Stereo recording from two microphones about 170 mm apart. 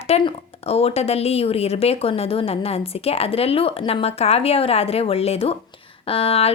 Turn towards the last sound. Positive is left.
turn(degrees=35)  # may be behind; listen again after turning